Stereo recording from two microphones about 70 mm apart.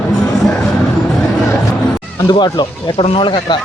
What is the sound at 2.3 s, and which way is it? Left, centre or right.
Speech, left.